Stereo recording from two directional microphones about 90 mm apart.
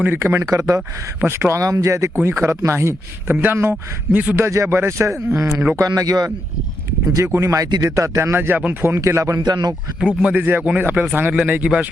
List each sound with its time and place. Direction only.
0.0 s a man's voice: 25° right (ahead or behind)
4.4 s a man's voice: 35° right (ahead or behind)
7.3 s a man's voice: 35° right (ahead or behind)
9.0 s a man's voice: 35° right (ahead or behind)
9.4 s speech: 50° right (ahead or behind)
10.2 s speech: 20° right (ahead or behind)